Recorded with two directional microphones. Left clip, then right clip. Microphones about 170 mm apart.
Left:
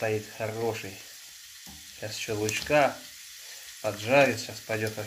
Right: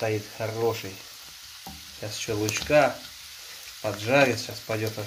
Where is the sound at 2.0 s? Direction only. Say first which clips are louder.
Right 2 dB; 5° right (ahead or behind).